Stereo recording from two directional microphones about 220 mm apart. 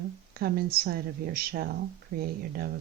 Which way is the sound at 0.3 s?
45° right (ahead or behind).